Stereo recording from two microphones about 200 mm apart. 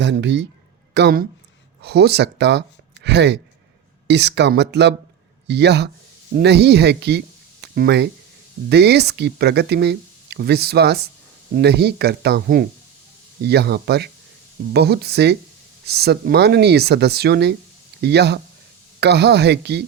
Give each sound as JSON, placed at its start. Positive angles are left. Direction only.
{"t": 0.0, "sound": "speech", "side_deg": -60}
{"t": 7.6, "sound": "a sound", "side_deg": -55}
{"t": 8.7, "sound": "speech", "side_deg": -55}